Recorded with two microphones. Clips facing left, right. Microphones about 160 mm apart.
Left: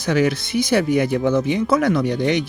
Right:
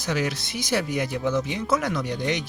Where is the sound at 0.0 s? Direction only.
60° left (ahead or behind).